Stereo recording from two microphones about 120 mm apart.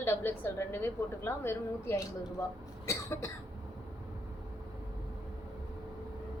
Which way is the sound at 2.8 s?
25° left (ahead or behind).